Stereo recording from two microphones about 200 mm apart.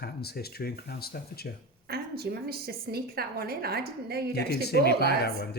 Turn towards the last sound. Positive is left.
turn(degrees=55)  # may be behind; listen again after turning